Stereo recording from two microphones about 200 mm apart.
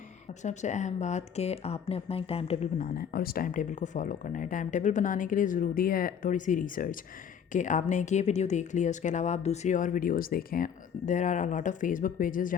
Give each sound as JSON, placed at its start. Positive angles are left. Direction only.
{"t": 0.4, "sound": "speech", "side_deg": 35}